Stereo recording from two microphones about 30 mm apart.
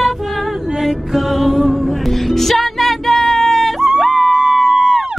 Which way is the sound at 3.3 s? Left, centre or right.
Centre.